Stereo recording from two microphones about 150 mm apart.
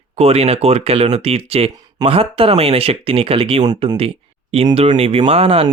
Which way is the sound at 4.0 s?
40° right (ahead or behind).